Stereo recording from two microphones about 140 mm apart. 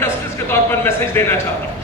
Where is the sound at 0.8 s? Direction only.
15° left (ahead or behind).